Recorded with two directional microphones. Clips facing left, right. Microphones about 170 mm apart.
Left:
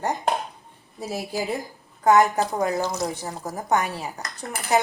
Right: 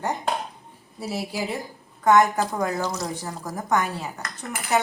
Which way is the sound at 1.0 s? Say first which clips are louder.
Even; 45° left (ahead or behind).